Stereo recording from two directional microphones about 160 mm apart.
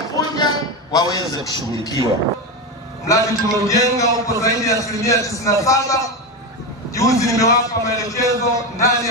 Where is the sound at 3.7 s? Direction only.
20° left (ahead or behind).